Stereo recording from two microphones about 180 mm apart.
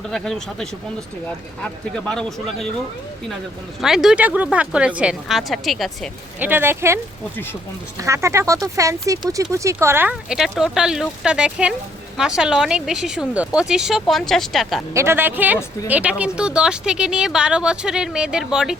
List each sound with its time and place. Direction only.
0.1 s speech: centre (ahead or behind)
3.8 s speech: centre (ahead or behind)
6.4 s speech: 10° right (ahead or behind)
14.9 s speech: 15° right (ahead or behind)